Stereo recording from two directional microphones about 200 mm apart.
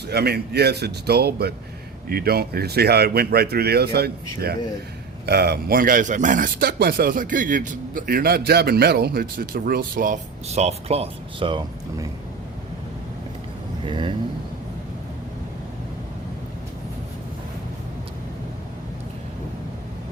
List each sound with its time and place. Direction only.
0.1 s a man's voice: 55° right (ahead or behind)
6.7 s a man's voice: 55° right (ahead or behind); by 12.0 s 25° right (ahead or behind)
13.8 s speech: 25° right (ahead or behind)